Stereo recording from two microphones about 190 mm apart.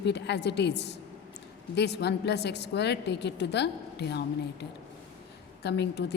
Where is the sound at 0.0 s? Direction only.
65° left (ahead or behind).